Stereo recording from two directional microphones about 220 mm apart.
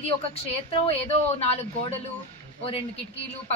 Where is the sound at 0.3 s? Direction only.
25° left (ahead or behind).